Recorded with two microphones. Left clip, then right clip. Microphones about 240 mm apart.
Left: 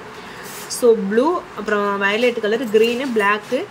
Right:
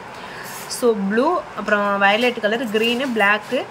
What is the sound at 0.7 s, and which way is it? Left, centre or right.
Speech, centre.